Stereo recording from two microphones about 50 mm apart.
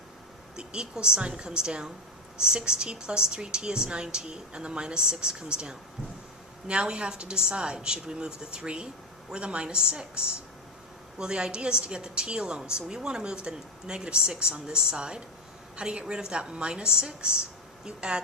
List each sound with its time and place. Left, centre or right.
0.5 s a woman's voice: centre